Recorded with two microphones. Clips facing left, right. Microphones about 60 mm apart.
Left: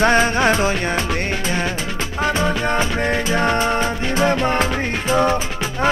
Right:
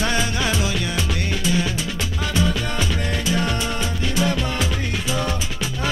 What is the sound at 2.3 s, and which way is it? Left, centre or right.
Music, left.